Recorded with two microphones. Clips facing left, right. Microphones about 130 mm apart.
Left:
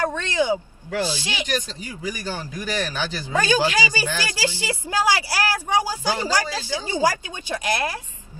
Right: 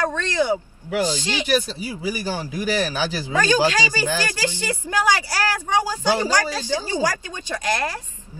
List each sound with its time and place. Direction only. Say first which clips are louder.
0.1 s speech: right 1 dB; 15° left (ahead or behind)
0.8 s a man's voice: right 3 dB; 15° right (ahead or behind)
1.1 s speech: right 4 dB; 15° left (ahead or behind)
1.5 s a man's voice: right 8 dB; 10° right (ahead or behind)
3.6 s speech: right 2 dB; 15° left (ahead or behind)